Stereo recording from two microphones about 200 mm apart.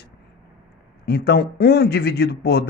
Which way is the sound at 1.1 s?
50° left (ahead or behind).